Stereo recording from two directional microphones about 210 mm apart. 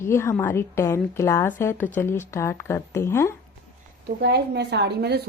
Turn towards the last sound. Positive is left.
turn(degrees=-50)  # may be behind; listen again after turning